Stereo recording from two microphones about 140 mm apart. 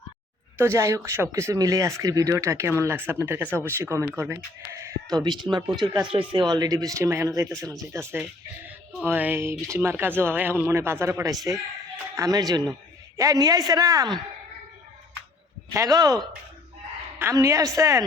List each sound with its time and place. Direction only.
0.6 s speech: 20° right (ahead or behind)
5.1 s speech: 30° right (ahead or behind)
15.7 s speech: 25° right (ahead or behind)
17.2 s speech: 20° right (ahead or behind)